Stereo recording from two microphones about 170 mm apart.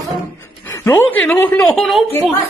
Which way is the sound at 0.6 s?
15° left (ahead or behind).